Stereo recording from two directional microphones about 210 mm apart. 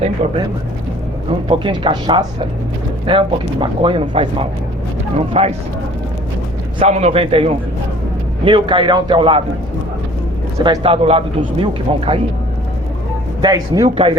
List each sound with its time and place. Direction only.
0.2 s speech: 35° right (ahead or behind)
6.7 s speech: 30° right (ahead or behind)
10.6 s speech: 25° right (ahead or behind)
13.4 s speech: 15° right (ahead or behind)